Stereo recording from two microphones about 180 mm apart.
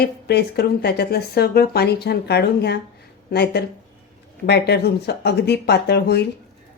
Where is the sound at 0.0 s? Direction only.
65° left (ahead or behind).